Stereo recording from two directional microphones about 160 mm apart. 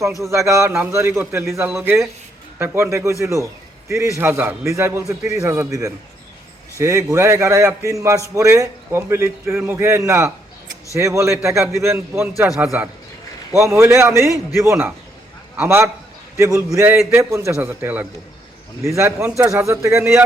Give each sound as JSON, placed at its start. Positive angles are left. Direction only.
{"t": 0.3, "sound": "a man's voice", "side_deg": -20}